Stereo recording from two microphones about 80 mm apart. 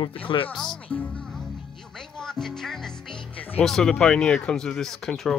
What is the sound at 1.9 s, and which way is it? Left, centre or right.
Music, centre.